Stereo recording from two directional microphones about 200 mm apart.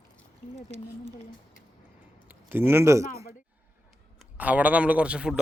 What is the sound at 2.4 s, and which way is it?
Speech, 10° right (ahead or behind).